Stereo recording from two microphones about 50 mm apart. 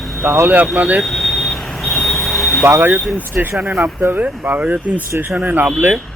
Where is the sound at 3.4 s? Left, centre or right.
Right.